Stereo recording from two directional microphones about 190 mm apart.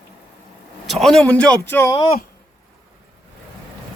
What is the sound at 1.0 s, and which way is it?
Speech, 5° left (ahead or behind).